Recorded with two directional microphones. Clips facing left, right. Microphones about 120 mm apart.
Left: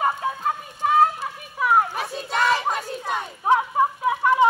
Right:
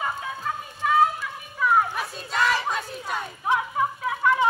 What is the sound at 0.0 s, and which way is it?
Run, 40° left (ahead or behind).